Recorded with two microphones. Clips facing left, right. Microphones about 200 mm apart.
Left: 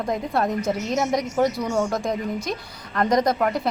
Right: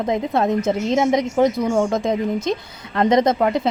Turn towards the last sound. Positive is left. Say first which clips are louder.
# right 4 dB
turn(degrees=-25)  # may be behind; listen again after turning